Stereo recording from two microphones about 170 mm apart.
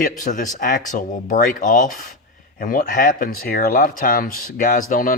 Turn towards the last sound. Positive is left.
turn(degrees=55)  # may be behind; listen again after turning